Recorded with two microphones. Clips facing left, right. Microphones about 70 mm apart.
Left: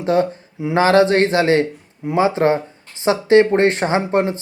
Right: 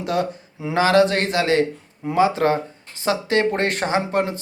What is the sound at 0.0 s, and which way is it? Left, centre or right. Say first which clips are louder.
A man's voice: left 6 dB; left.